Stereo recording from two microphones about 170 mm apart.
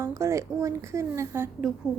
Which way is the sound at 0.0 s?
15° right (ahead or behind).